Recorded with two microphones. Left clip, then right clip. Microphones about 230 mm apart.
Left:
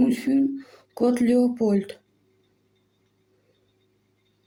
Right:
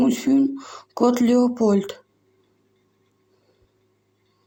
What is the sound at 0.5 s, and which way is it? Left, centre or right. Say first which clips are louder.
Speech: right 3 dB; right.